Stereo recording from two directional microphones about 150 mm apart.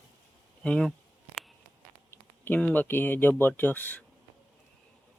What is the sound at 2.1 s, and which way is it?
Speech, 10° left (ahead or behind).